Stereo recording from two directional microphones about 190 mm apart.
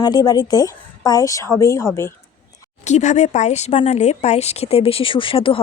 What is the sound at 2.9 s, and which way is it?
A woman's voice, 40° left (ahead or behind).